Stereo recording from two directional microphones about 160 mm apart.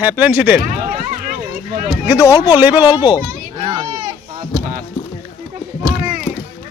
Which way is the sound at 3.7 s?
25° right (ahead or behind).